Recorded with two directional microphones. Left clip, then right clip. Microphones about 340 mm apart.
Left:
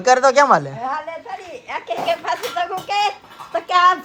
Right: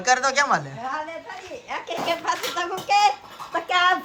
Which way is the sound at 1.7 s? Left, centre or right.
Centre.